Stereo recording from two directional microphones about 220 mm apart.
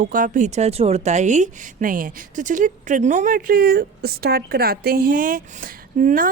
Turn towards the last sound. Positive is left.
turn(degrees=-35)  # may be behind; listen again after turning